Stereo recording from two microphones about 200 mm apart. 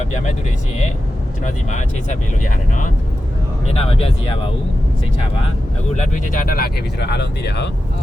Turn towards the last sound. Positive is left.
turn(degrees=55)  # may be behind; listen again after turning